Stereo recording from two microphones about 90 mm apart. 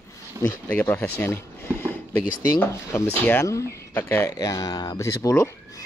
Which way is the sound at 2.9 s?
30° left (ahead or behind).